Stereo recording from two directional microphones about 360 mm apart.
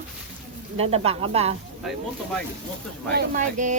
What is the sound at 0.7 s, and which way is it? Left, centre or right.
Speech, centre.